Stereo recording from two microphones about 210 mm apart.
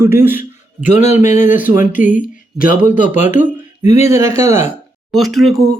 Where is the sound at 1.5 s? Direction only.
10° right (ahead or behind).